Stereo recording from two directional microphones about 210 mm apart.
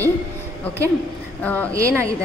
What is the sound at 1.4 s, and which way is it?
Speech, 5° left (ahead or behind).